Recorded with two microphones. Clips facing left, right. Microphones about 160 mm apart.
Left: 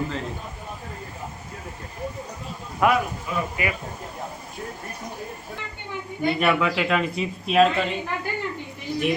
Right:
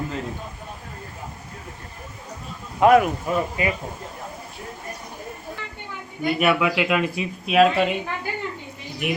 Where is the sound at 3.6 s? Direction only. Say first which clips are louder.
Right 3 dB; 30° right (ahead or behind).